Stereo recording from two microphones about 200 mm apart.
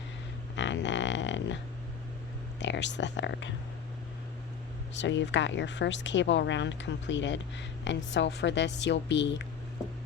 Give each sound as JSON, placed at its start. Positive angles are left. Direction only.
{"t": 0.5, "sound": "a sound", "side_deg": 65}
{"t": 2.6, "sound": "speech", "side_deg": 60}
{"t": 4.9, "sound": "speech", "side_deg": 65}